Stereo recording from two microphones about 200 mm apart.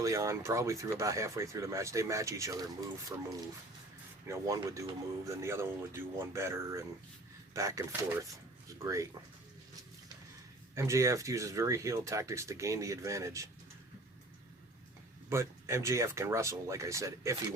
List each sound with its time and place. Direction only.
0.0 s speech: 15° right (ahead or behind)
4.3 s speech: 15° right (ahead or behind)
10.8 s speech: 15° right (ahead or behind)
15.3 s speech: 15° right (ahead or behind)